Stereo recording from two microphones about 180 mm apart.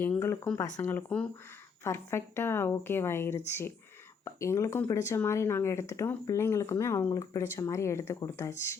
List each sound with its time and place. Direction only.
0.0 s speech: 10° left (ahead or behind)